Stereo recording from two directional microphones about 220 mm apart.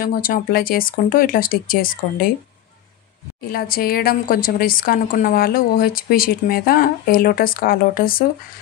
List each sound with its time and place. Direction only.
0.0 s a woman's voice: 40° left (ahead or behind)
3.5 s a woman's voice: 40° left (ahead or behind)